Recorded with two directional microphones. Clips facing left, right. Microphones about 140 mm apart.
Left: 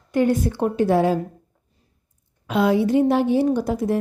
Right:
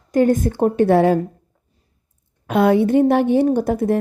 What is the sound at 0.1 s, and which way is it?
A woman's voice, 45° right (ahead or behind).